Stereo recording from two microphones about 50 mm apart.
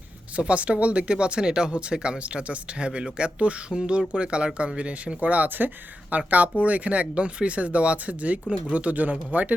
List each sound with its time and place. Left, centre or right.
0.3 s speech: right